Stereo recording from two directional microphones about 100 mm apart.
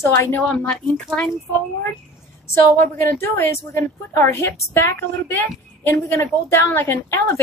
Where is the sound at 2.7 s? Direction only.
20° left (ahead or behind).